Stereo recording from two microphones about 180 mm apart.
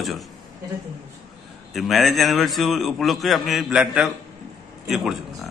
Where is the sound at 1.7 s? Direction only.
Centre (ahead or behind).